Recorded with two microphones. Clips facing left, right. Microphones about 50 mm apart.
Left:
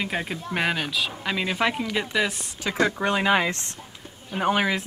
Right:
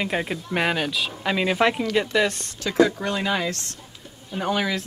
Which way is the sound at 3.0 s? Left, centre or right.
Left.